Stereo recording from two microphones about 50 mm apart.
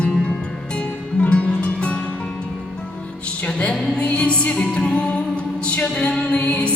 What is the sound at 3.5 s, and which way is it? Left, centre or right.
Music, left.